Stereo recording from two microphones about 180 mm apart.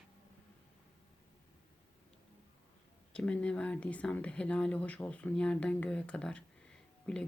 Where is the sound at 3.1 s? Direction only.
5° left (ahead or behind).